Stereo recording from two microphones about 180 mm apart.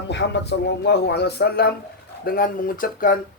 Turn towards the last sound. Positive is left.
turn(degrees=50)  # may be behind; listen again after turning